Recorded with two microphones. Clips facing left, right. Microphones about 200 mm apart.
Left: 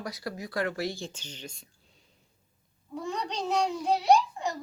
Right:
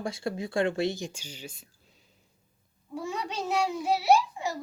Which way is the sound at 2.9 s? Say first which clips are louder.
Even; 10° right (ahead or behind).